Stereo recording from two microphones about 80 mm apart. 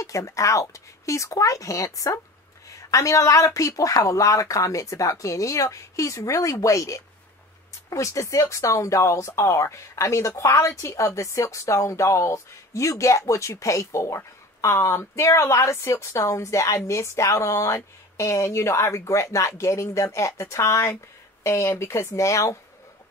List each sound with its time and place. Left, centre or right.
0.0 s speech: left
2.9 s a woman's voice: left